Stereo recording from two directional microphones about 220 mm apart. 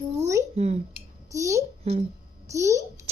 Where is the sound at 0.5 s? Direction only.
30° right (ahead or behind).